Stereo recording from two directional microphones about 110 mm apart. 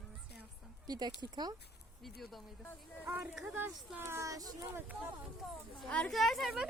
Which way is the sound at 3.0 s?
15° right (ahead or behind).